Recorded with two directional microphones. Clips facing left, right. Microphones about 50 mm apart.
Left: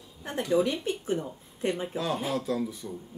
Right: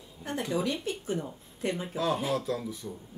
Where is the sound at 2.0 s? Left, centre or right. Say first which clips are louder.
Right 1 dB; centre.